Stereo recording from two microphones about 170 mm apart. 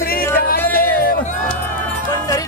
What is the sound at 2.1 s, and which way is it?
Speech, 20° left (ahead or behind).